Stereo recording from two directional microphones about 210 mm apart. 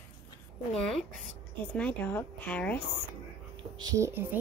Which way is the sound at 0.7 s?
5° left (ahead or behind).